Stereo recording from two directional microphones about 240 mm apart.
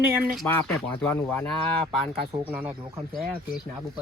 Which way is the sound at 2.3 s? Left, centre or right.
Centre.